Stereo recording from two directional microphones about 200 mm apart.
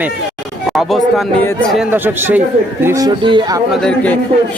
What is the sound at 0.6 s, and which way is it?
Speech, centre (ahead or behind).